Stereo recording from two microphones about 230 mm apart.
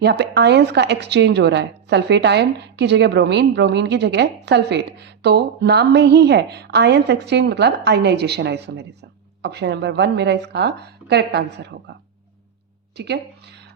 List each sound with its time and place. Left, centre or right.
0.0 s a woman's voice: right